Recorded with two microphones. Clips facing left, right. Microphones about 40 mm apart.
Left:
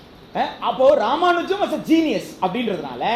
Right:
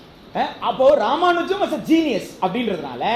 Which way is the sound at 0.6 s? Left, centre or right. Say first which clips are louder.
Even; centre.